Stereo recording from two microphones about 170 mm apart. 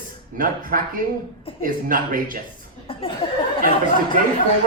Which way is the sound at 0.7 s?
55° right (ahead or behind).